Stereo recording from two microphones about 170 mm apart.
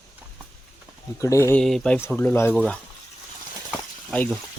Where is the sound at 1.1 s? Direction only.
15° left (ahead or behind).